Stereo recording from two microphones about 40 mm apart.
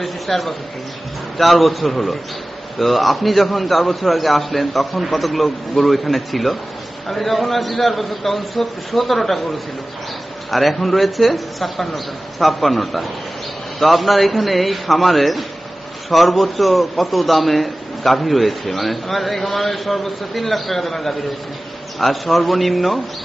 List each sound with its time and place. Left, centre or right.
0.0 s a man's voice: centre
10.5 s a man's voice: centre